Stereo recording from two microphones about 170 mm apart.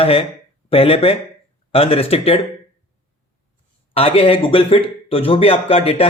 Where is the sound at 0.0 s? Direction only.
35° left (ahead or behind).